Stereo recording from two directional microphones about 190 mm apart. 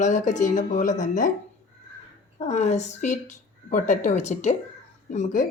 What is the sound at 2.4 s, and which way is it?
Speech, 35° left (ahead or behind).